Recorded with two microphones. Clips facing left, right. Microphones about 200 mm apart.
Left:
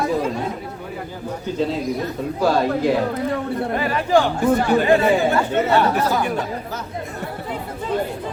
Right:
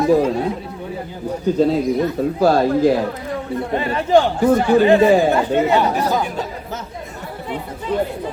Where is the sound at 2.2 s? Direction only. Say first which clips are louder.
Right 6 dB; 35° right (ahead or behind).